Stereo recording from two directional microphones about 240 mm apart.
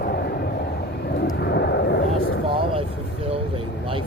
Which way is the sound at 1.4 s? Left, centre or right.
Left.